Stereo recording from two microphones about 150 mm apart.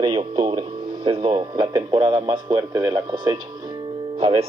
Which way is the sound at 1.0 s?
35° right (ahead or behind).